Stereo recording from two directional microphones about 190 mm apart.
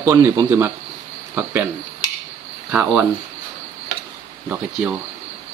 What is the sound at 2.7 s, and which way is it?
Speech, 5° right (ahead or behind).